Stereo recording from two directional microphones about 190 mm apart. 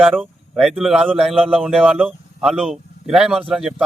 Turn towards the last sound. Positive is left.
turn(degrees=-5)  # may be behind; listen again after turning